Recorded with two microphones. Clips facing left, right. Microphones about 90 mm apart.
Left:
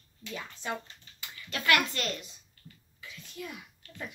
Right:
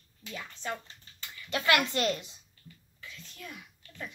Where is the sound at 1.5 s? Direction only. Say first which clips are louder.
Right 1 dB; 25° right (ahead or behind).